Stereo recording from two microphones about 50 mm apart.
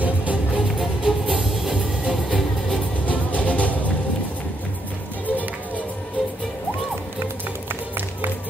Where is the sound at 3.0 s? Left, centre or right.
Left.